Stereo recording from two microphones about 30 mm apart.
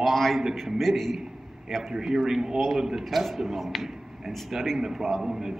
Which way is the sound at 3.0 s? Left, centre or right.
Centre.